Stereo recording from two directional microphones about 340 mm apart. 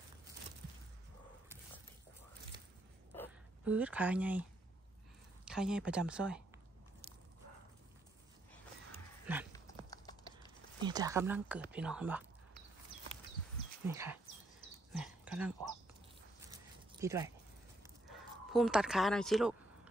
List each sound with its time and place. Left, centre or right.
3.2 s a sound: centre
5.4 s speech: centre
8.9 s dog: centre
9.5 s a sound: centre
10.8 s speech: centre
13.8 s speech: centre
14.9 s dog: centre
16.4 s zipper: centre
18.5 s speech: centre